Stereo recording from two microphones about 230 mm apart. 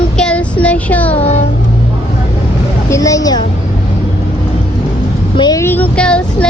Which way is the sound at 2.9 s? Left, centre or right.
Centre.